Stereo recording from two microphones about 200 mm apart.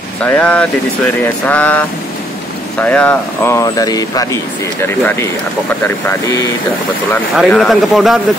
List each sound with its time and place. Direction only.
0.2 s speech: 5° left (ahead or behind)
7.3 s speech: centre (ahead or behind)